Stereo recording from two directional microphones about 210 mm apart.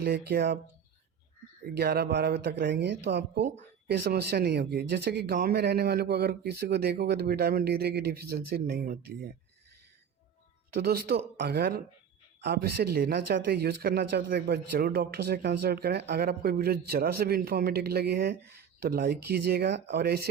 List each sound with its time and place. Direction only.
0.0 s speech: 50° right (ahead or behind)
1.6 s speech: 50° right (ahead or behind)
10.8 s speech: 50° right (ahead or behind)